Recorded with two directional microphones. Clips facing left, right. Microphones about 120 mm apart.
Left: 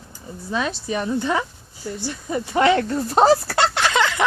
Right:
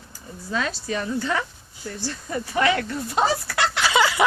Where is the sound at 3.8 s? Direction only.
5° right (ahead or behind).